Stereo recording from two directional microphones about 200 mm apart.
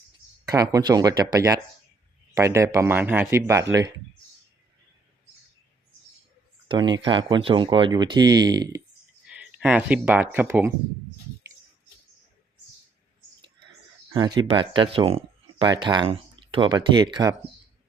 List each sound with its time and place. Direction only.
0.4 s speech: 20° right (ahead or behind)
6.7 s speech: 20° right (ahead or behind)
9.2 s speech: 5° right (ahead or behind)
14.1 s speech: 20° right (ahead or behind)